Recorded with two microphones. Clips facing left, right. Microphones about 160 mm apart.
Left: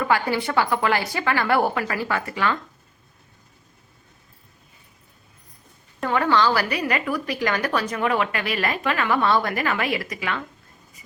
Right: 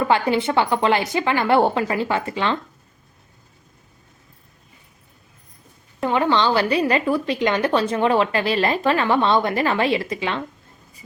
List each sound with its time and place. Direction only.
0.0 s a woman's voice: 25° right (ahead or behind)
6.0 s a woman's voice: 20° right (ahead or behind)